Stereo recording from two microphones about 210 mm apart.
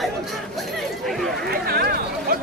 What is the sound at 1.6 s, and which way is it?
Chatter, 45° right (ahead or behind).